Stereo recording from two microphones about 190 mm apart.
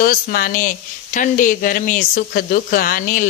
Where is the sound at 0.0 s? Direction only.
50° left (ahead or behind).